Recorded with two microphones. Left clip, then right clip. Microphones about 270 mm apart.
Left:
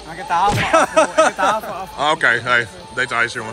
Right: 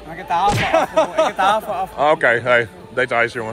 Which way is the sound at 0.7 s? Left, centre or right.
Left.